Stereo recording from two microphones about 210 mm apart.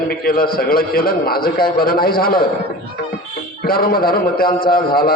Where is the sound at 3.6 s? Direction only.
45° left (ahead or behind).